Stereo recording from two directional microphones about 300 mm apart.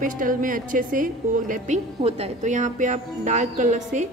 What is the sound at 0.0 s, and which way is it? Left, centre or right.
A woman's voice, right.